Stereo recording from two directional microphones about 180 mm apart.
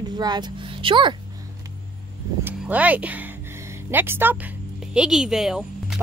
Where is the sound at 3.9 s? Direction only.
10° right (ahead or behind).